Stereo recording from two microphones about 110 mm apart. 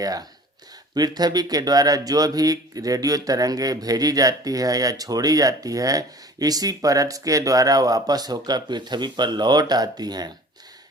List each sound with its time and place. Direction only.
0.0 s speech: 35° right (ahead or behind)